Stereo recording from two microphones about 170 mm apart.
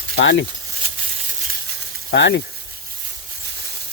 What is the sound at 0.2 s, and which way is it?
Speech, 90° left.